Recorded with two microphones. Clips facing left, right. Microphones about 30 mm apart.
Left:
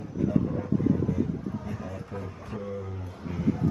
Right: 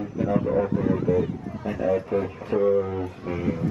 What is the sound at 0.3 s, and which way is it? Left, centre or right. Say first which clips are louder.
Speech: right 6 dB; right.